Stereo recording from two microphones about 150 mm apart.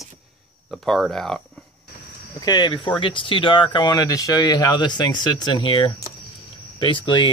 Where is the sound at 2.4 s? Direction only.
30° left (ahead or behind).